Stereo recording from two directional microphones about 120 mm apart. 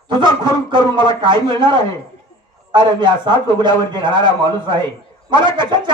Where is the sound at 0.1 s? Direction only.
40° right (ahead or behind).